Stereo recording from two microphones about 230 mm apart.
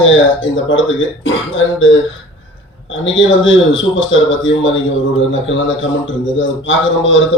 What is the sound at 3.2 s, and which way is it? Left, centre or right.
A man's voice, left.